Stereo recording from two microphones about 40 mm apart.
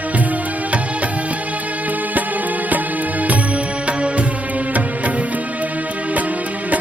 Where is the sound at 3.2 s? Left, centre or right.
Right.